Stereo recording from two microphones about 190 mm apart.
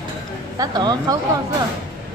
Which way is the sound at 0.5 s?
20° right (ahead or behind).